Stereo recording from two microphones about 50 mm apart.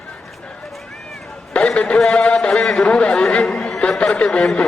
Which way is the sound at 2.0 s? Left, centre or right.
Centre.